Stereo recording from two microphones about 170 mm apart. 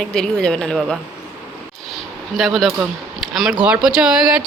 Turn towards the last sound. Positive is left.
turn(degrees=-5)  # may be behind; listen again after turning